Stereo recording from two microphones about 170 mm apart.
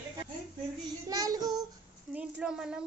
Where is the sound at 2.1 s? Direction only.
5° right (ahead or behind).